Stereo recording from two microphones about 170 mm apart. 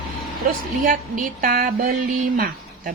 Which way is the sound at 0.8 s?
50° right (ahead or behind).